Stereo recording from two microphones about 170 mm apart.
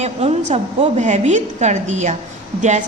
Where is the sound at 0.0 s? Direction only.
40° right (ahead or behind).